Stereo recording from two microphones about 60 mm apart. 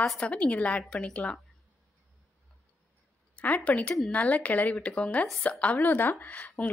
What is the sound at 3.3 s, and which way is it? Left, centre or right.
A woman's voice, left.